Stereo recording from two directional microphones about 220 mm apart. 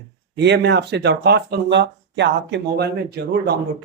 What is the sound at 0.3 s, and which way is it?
Speech, 50° right (ahead or behind).